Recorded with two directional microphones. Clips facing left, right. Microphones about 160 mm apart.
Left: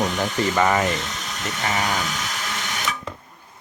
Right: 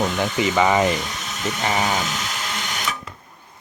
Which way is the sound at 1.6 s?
25° right (ahead or behind).